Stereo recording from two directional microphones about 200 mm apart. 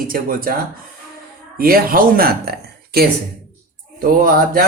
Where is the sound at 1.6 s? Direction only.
45° right (ahead or behind).